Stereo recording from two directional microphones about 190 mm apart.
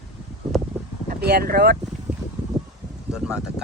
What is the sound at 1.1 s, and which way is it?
Speech, 55° right (ahead or behind).